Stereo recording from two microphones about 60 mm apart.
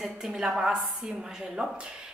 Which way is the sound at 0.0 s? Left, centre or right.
Centre.